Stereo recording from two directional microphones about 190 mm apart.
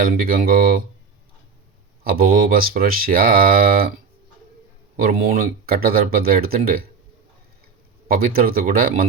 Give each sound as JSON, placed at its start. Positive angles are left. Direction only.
{"t": 0.0, "sound": "speech", "side_deg": -50}
{"t": 2.0, "sound": "speech", "side_deg": -50}
{"t": 4.9, "sound": "speech", "side_deg": -50}
{"t": 8.0, "sound": "speech", "side_deg": -50}